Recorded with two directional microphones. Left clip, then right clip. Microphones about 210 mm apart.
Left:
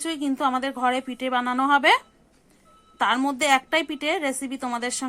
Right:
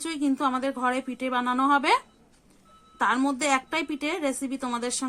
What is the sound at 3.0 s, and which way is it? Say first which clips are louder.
Speech: left 2 dB; 25° left (ahead or behind).